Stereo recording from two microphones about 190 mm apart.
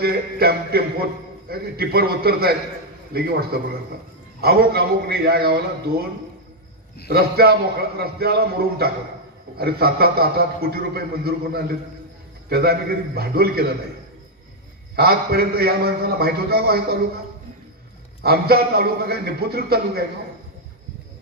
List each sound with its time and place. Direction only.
0.0 s a man's voice: 55° right (ahead or behind)
7.1 s a man's voice: 55° right (ahead or behind)
15.0 s a man's voice: 55° right (ahead or behind)
18.2 s a man's voice: 55° right (ahead or behind)